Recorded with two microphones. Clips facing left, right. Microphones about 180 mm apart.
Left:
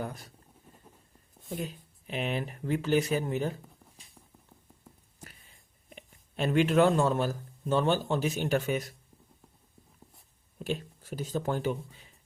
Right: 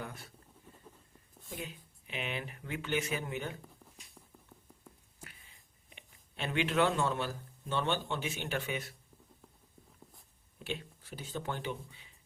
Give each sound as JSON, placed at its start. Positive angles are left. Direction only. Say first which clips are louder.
{"t": 0.0, "sound": "a sound", "louder": "left 7 dB", "side_deg": 40}
{"t": 1.5, "sound": "speech", "louder": "left 7 dB", "side_deg": 40}
{"t": 5.2, "sound": "speech", "louder": "left 3 dB", "side_deg": 40}
{"t": 10.6, "sound": "speech", "louder": "left 7 dB", "side_deg": 45}